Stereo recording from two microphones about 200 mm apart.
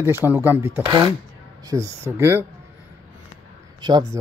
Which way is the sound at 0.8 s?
25° right (ahead or behind).